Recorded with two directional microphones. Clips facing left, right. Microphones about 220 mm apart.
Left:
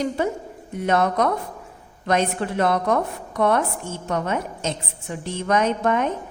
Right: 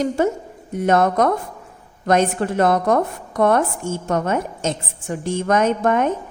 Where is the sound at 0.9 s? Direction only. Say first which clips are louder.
Right 4 dB; 45° right (ahead or behind).